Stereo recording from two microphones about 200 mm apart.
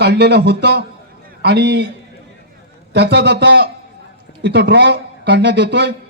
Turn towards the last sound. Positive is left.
turn(degrees=-60)  # may be behind; listen again after turning